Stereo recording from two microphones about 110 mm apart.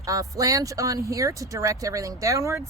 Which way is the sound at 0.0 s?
30° right (ahead or behind).